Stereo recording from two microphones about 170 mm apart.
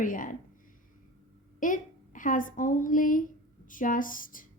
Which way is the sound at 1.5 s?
50° left (ahead or behind).